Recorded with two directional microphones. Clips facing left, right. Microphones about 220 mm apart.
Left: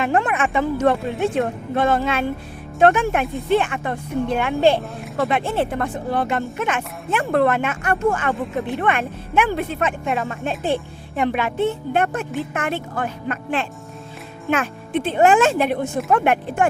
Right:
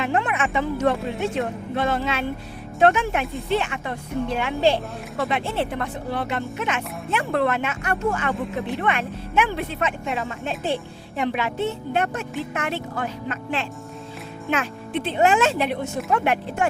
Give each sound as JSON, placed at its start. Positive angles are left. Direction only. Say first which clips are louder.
{"t": 0.0, "sound": "speech", "louder": "left 3 dB", "side_deg": 50}